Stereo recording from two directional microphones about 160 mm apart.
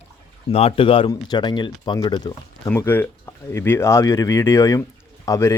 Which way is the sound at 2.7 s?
15° left (ahead or behind).